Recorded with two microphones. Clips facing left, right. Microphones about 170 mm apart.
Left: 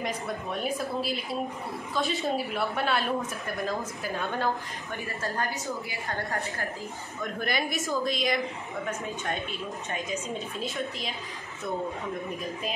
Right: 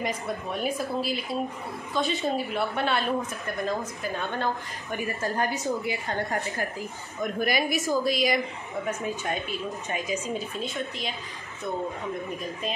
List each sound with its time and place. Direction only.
0.0 s a woman's voice: centre (ahead or behind)
4.9 s a woman's voice: 20° right (ahead or behind); by 11.1 s centre (ahead or behind)